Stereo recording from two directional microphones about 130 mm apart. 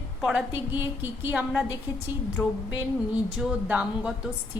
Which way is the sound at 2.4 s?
10° left (ahead or behind).